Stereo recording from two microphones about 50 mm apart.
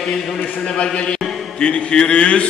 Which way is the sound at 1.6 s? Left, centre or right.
Left.